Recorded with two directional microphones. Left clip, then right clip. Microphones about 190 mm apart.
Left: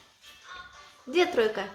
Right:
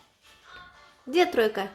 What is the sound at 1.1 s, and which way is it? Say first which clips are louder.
Speech: right 2 dB; 35° right (ahead or behind).